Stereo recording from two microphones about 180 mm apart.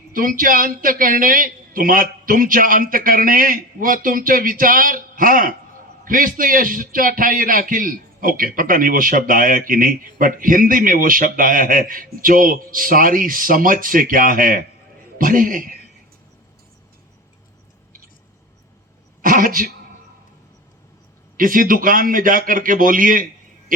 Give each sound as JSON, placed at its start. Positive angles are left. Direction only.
{"t": 0.1, "sound": "a man's voice", "side_deg": -50}
{"t": 19.2, "sound": "speech", "side_deg": -50}
{"t": 21.3, "sound": "a man's voice", "side_deg": -50}